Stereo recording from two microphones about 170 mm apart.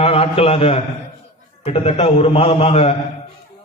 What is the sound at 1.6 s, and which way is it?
A man's voice, 35° left (ahead or behind).